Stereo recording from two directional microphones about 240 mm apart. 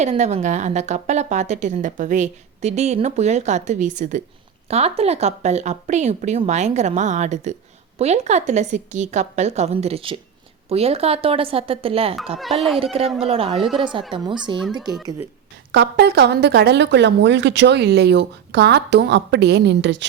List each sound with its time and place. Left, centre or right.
0.0 s a woman's voice: right
12.4 s speech: centre
12.8 s a woman's voice: right
14.6 s speech: centre
15.7 s speech: right